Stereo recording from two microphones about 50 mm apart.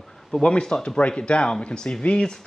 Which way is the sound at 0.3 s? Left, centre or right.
Centre.